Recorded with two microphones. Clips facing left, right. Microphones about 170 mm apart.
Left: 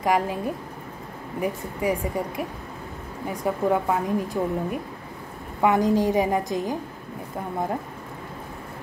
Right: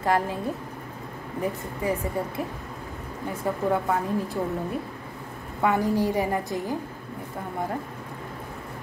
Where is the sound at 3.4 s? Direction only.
15° left (ahead or behind).